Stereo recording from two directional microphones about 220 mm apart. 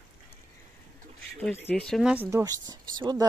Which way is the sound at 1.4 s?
10° left (ahead or behind).